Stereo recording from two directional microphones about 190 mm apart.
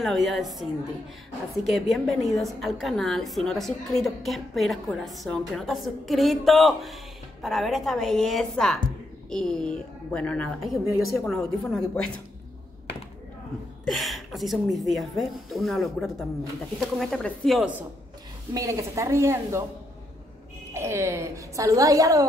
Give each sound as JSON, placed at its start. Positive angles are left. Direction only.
{"t": 0.0, "sound": "a woman's voice", "side_deg": 0}
{"t": 13.8, "sound": "a woman's voice", "side_deg": 0}
{"t": 18.5, "sound": "a woman's voice", "side_deg": -15}
{"t": 20.7, "sound": "a woman's voice", "side_deg": -15}